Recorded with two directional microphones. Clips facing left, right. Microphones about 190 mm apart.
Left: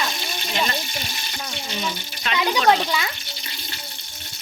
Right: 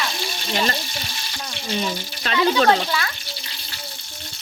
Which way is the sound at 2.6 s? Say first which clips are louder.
Even; 15° left (ahead or behind).